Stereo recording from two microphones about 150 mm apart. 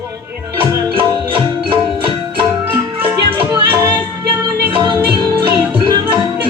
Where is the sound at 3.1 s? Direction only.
15° right (ahead or behind).